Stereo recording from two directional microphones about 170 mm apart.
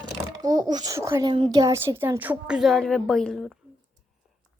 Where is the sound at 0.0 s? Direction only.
25° right (ahead or behind).